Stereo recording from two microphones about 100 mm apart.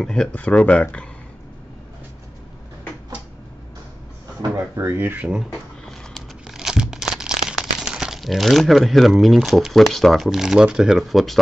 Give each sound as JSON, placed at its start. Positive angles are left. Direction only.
{"t": 0.0, "sound": "speech", "side_deg": 5}
{"t": 4.7, "sound": "speech", "side_deg": -20}
{"t": 5.5, "sound": "crumpling", "side_deg": 5}